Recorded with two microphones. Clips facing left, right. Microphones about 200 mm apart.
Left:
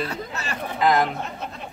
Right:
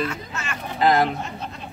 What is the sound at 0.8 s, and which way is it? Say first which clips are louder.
Speech: right 1 dB; 35° right (ahead or behind).